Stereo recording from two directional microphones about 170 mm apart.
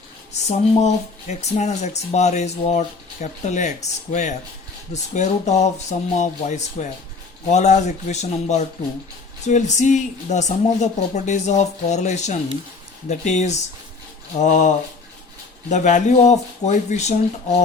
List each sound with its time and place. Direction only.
0.4 s speech: 40° left (ahead or behind)
15.7 s speech: 45° left (ahead or behind)